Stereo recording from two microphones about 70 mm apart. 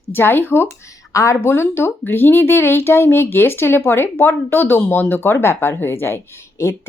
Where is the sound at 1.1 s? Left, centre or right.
Left.